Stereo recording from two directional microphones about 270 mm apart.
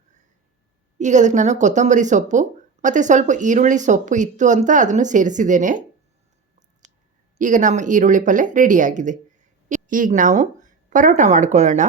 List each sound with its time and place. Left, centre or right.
0.9 s speech: right
7.3 s speech: right